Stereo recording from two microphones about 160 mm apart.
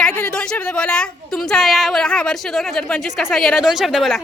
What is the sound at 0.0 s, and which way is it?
A woman's voice, 5° left (ahead or behind).